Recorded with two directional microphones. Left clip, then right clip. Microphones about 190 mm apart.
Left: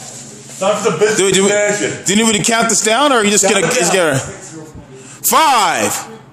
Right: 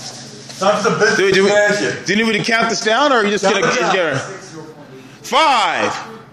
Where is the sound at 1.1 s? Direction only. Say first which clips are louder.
Even; 30° left (ahead or behind).